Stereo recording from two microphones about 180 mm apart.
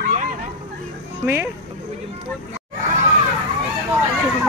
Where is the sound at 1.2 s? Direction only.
10° right (ahead or behind).